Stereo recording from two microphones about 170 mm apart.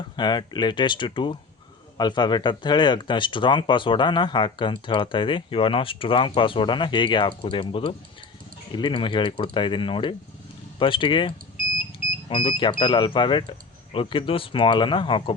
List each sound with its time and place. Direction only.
0.2 s speech: 25° left (ahead or behind)